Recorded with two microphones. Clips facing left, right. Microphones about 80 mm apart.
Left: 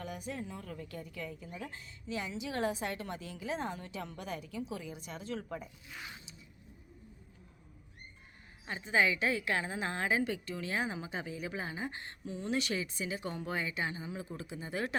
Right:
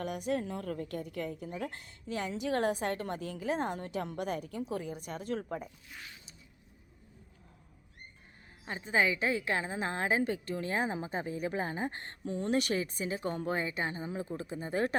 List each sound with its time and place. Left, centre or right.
0.0 s a woman's voice: right
8.6 s a woman's voice: right